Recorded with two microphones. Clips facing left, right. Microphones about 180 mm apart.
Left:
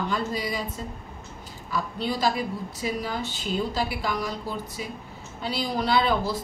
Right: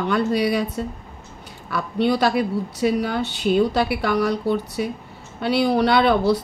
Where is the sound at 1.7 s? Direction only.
65° right (ahead or behind).